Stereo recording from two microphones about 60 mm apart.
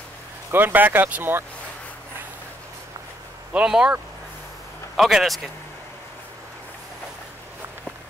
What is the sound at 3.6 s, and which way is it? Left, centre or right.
Speech, centre.